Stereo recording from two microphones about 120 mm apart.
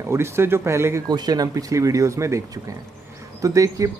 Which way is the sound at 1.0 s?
35° right (ahead or behind).